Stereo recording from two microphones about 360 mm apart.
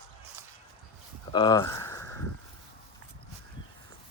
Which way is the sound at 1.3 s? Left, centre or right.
Centre.